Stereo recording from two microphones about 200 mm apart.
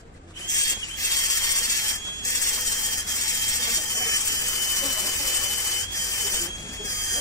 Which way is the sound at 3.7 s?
15° left (ahead or behind).